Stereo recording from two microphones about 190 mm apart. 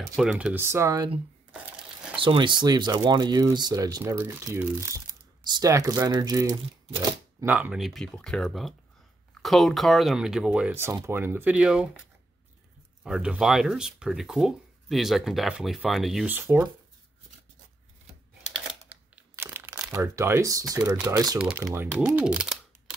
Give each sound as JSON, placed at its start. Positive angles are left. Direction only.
{"t": 0.2, "sound": "speech", "side_deg": -5}
{"t": 7.4, "sound": "speech", "side_deg": -10}
{"t": 13.0, "sound": "speech", "side_deg": -5}
{"t": 18.5, "sound": "crumpling", "side_deg": -5}
{"t": 20.7, "sound": "speech", "side_deg": -15}
{"t": 21.4, "sound": "speech", "side_deg": -5}